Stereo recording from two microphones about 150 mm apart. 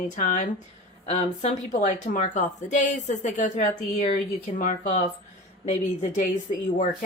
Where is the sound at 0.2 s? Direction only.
55° left (ahead or behind).